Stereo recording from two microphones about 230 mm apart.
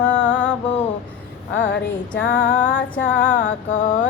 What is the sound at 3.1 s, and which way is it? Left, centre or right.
Speech, left.